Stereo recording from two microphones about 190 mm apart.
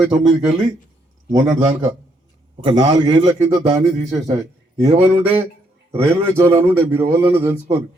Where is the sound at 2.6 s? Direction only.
25° right (ahead or behind).